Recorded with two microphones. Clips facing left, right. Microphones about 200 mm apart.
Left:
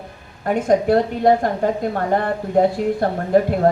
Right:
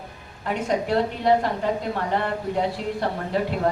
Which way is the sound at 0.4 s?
50° left (ahead or behind).